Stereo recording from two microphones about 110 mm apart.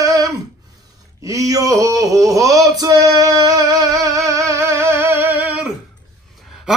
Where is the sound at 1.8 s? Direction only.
30° right (ahead or behind); by 5.7 s 15° right (ahead or behind).